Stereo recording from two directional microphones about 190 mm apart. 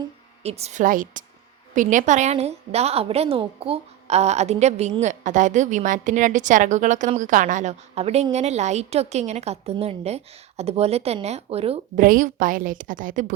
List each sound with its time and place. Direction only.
0.4 s a woman's voice: 35° right (ahead or behind)
12.0 s a woman's voice: 45° right (ahead or behind)